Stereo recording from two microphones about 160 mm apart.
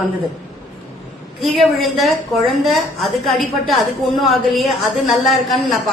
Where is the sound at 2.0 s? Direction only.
Centre (ahead or behind).